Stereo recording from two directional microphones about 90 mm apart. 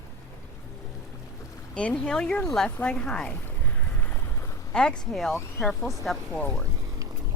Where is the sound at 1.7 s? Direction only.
10° left (ahead or behind).